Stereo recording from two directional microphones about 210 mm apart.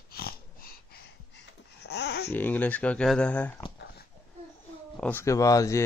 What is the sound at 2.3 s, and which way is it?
Speech, 10° left (ahead or behind).